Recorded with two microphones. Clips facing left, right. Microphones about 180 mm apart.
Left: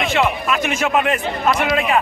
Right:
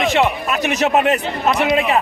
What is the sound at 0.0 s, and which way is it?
A man's voice, 40° right (ahead or behind).